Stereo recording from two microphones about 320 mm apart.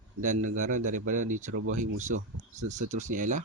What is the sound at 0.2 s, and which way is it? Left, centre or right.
Speech, right.